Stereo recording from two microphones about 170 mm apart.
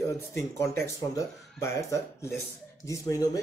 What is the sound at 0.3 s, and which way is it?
A man's voice, 15° left (ahead or behind).